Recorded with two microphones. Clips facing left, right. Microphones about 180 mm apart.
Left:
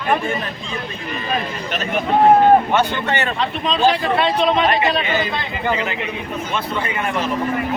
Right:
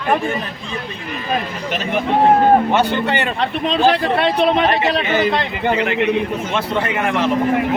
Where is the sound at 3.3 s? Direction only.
60° right (ahead or behind).